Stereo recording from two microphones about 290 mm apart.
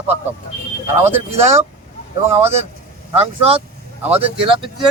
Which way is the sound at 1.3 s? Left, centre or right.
Right.